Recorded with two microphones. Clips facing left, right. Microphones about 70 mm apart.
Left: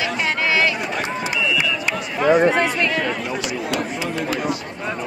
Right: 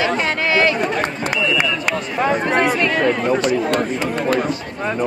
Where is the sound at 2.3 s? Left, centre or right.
Centre.